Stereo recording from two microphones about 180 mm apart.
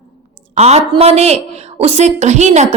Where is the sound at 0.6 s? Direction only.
35° right (ahead or behind).